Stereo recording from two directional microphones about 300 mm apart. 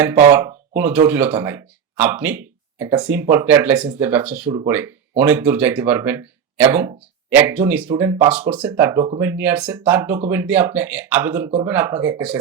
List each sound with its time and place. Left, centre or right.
0.0 s speech: centre